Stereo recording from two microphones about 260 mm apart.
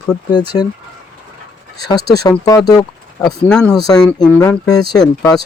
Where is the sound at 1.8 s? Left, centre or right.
Centre.